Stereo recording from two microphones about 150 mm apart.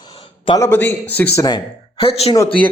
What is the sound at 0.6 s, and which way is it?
Speech, 15° left (ahead or behind).